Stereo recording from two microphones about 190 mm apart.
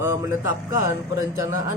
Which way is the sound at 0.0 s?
15° right (ahead or behind).